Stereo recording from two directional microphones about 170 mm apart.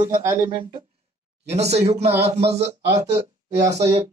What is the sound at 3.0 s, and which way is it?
Speech, 40° right (ahead or behind).